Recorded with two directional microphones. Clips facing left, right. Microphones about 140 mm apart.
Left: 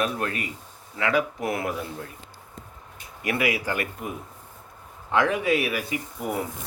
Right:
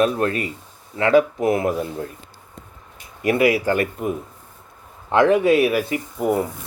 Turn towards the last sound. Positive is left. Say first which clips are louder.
# right 8 dB
turn(degrees=-30)  # may be behind; listen again after turning